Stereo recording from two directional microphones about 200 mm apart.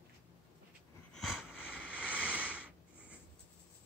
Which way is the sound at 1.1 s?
Centre (ahead or behind).